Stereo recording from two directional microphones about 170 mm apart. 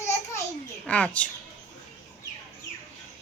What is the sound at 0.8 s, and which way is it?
Speech, 5° left (ahead or behind).